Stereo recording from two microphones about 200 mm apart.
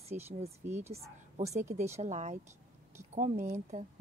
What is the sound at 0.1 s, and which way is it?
Speech, 30° right (ahead or behind).